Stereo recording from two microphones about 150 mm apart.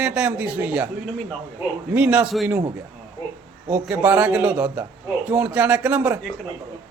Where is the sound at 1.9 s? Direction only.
10° right (ahead or behind).